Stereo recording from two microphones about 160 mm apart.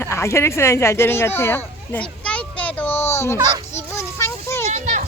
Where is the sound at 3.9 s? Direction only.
15° left (ahead or behind).